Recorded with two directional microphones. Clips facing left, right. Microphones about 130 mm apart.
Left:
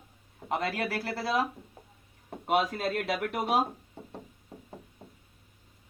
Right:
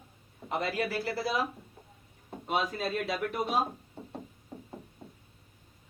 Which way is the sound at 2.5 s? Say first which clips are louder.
Left 4 dB; 70° left (ahead or behind).